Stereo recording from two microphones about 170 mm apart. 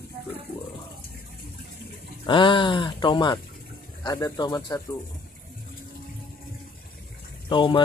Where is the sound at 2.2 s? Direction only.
30° left (ahead or behind).